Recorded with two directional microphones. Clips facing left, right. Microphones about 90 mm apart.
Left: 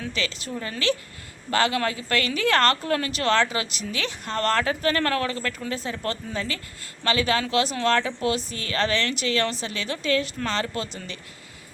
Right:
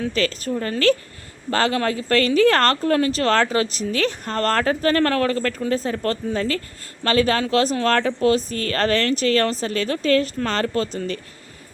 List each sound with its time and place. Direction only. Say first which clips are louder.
0.0 s a woman's voice: right 8 dB; 40° right (ahead or behind)